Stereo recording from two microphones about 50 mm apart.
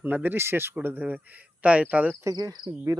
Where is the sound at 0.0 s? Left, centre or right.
Right.